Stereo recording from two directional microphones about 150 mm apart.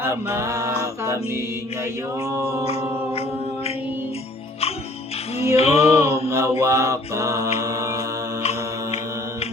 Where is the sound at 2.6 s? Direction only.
40° left (ahead or behind).